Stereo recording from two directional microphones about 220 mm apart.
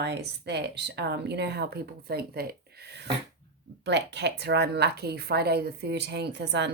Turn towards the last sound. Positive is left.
turn(degrees=-50)  # may be behind; listen again after turning